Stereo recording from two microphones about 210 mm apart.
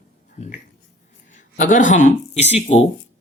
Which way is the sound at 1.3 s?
35° left (ahead or behind).